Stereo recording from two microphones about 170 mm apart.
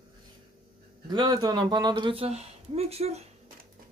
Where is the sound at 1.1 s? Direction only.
25° right (ahead or behind).